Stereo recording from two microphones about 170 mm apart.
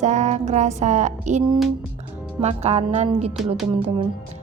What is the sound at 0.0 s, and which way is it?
Music, 45° right (ahead or behind).